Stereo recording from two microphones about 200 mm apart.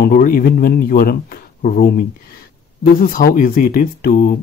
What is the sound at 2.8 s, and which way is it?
Speech, 45° left (ahead or behind).